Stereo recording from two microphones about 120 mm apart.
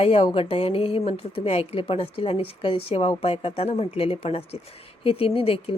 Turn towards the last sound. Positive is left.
turn(degrees=50)  # may be behind; listen again after turning